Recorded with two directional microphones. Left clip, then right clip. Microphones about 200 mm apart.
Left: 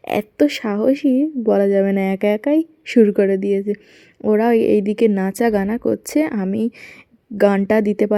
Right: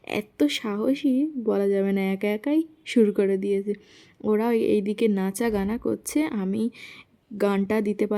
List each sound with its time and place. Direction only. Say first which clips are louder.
0.0 s speech: left 8 dB; 15° left (ahead or behind)